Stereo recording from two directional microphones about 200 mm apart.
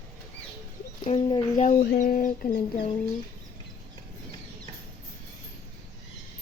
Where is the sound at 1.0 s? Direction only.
30° left (ahead or behind); by 2.6 s 45° left (ahead or behind).